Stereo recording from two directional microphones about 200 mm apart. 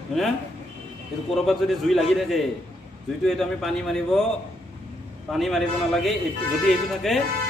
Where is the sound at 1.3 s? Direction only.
Centre (ahead or behind).